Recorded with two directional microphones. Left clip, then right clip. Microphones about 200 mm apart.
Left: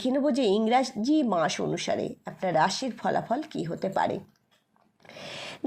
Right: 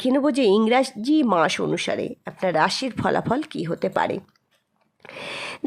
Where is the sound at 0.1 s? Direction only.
25° right (ahead or behind).